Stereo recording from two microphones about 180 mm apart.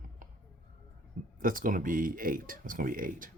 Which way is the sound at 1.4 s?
50° right (ahead or behind).